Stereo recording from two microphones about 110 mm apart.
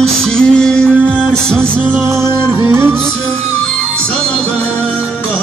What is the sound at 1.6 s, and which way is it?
Music, 20° right (ahead or behind).